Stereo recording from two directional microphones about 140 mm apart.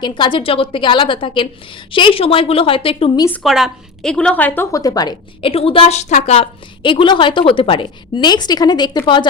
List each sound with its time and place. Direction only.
0.0 s a woman's voice: 35° left (ahead or behind)
3.2 s a woman's voice: 15° left (ahead or behind)
3.4 s a woman's voice: centre (ahead or behind); by 9.2 s 30° left (ahead or behind)